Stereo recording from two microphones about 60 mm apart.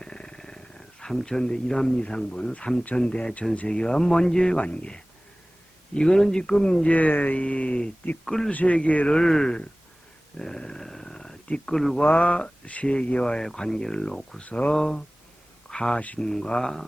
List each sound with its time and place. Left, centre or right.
0.0 s speech: centre
8.2 s speech: centre
8.4 s speech: left
9.1 s speech: centre
10.3 s a sound: centre
12.0 s speech: left
14.4 s speech: left
16.0 s speech: left
16.2 s speech: centre